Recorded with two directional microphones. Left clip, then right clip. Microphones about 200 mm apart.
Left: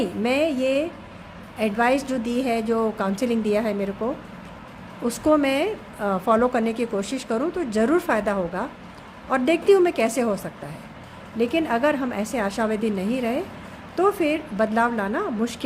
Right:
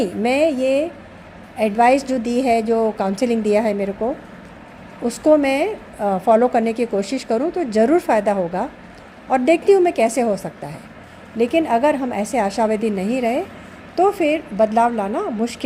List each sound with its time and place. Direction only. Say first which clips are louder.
0.0 s a woman's voice: right 5 dB; 15° right (ahead or behind)
5.0 s a woman's voice: right 5 dB; 10° right (ahead or behind)